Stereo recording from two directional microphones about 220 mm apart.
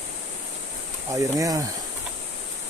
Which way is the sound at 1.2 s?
15° right (ahead or behind).